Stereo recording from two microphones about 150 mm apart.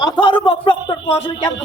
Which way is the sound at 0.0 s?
35° left (ahead or behind).